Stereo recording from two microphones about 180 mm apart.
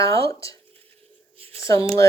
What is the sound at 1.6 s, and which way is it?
Speech, 20° left (ahead or behind).